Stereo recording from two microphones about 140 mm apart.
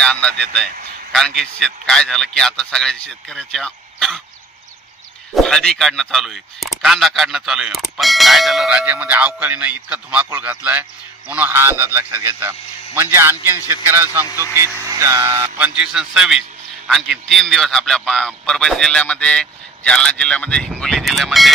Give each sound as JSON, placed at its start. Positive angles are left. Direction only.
{"t": 0.0, "sound": "a man's voice", "side_deg": 10}
{"t": 5.3, "sound": "speech", "side_deg": 5}
{"t": 14.6, "sound": "music", "side_deg": -20}
{"t": 15.5, "sound": "a man's voice", "side_deg": -10}